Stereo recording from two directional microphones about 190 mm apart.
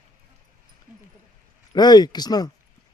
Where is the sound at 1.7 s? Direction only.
20° left (ahead or behind).